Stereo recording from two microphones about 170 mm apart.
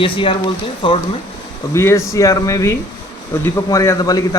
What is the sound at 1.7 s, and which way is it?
A man's voice, 15° left (ahead or behind).